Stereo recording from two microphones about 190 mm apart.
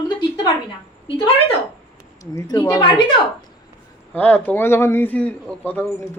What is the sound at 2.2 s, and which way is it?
Speech, 20° left (ahead or behind).